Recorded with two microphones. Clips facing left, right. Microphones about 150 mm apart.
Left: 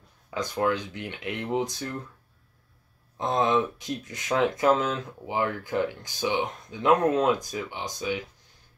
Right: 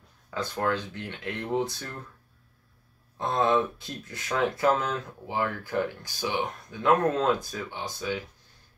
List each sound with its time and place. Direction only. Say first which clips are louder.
0.3 s speech: left 2 dB; 15° left (ahead or behind)
3.2 s speech: left 1 dB; 20° left (ahead or behind)